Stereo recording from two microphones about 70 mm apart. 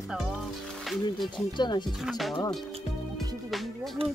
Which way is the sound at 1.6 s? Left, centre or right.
Left.